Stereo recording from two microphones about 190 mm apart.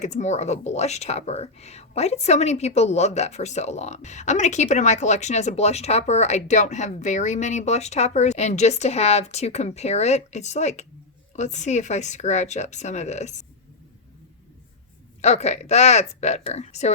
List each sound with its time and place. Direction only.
0.0 s speech: 40° left (ahead or behind)
15.2 s speech: 35° left (ahead or behind)